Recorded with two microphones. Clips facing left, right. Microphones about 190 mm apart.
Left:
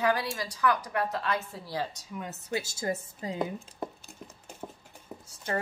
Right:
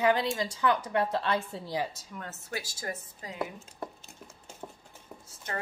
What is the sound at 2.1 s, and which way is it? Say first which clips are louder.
Speech: left 6 dB; 15° left (ahead or behind).